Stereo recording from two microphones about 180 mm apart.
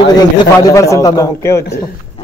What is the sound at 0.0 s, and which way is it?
A man's voice, 20° left (ahead or behind).